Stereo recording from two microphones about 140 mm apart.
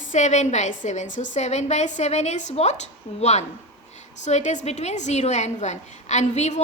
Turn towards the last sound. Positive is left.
turn(degrees=55)  # may be behind; listen again after turning